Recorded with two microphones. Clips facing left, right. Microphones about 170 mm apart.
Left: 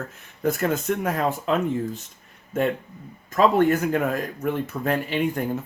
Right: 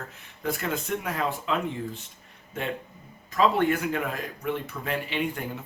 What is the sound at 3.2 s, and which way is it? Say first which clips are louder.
Speech: left 4 dB; 45° left (ahead or behind).